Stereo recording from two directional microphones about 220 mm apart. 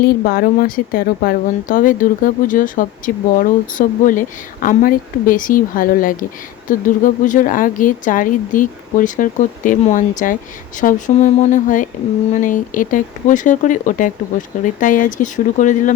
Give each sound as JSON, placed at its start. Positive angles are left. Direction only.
{"t": 0.0, "sound": "speech", "side_deg": 45}